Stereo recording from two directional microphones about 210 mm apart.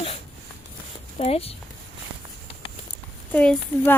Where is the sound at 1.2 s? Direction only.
30° left (ahead or behind).